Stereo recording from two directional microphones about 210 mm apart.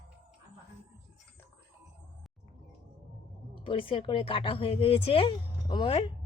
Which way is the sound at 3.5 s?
25° left (ahead or behind).